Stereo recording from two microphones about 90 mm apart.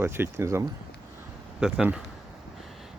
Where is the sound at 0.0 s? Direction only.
30° right (ahead or behind).